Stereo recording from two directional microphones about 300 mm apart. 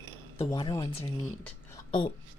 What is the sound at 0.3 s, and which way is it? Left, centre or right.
Speech, centre.